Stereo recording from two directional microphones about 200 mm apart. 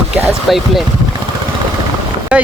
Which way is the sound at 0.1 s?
Centre (ahead or behind).